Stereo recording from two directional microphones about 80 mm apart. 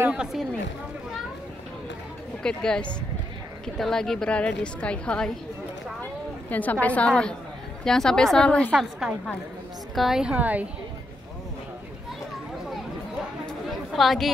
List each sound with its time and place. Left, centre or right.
0.1 s speech: centre
2.4 s a woman's voice: centre
6.5 s a woman's voice: left
9.9 s a woman's voice: centre
10.3 s a woman's voice: centre
13.7 s chatter: centre